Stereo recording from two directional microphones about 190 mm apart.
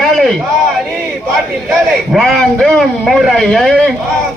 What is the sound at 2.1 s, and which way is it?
A man's voice, centre (ahead or behind).